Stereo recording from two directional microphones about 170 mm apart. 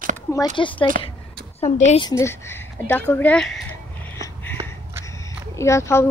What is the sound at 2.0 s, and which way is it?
Speech, 15° left (ahead or behind).